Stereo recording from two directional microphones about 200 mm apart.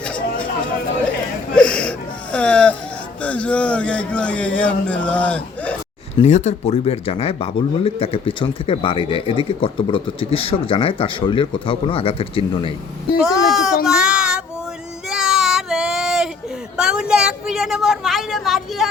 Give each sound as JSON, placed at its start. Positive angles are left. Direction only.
{"t": 1.5, "sound": "wheeze", "side_deg": 5}
{"t": 3.2, "sound": "speech", "side_deg": 5}
{"t": 6.1, "sound": "speech", "side_deg": 35}
{"t": 13.2, "sound": "a woman's voice", "side_deg": 0}
{"t": 13.8, "sound": "child singing", "side_deg": -5}
{"t": 15.1, "sound": "a sound", "side_deg": 0}
{"t": 16.7, "sound": "a woman's voice", "side_deg": -5}